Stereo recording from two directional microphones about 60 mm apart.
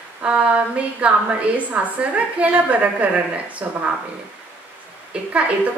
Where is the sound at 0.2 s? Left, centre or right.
Centre.